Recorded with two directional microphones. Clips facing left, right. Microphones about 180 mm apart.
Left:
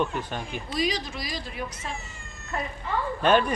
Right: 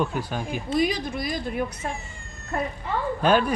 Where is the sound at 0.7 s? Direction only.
55° right (ahead or behind).